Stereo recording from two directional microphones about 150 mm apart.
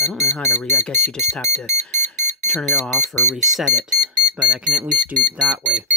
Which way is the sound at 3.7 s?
50° right (ahead or behind).